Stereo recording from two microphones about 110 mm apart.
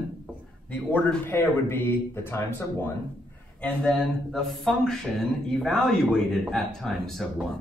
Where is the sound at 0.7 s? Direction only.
15° left (ahead or behind).